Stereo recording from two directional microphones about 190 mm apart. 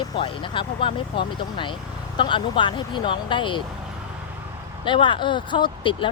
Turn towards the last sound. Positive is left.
turn(degrees=25)  # may be behind; listen again after turning